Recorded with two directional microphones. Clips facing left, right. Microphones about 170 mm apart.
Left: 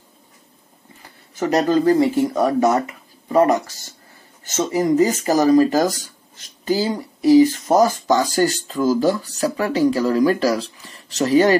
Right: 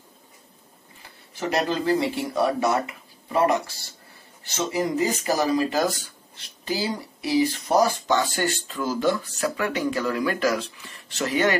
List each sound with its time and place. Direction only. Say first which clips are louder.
1.3 s speech: left 7 dB; 45° left (ahead or behind)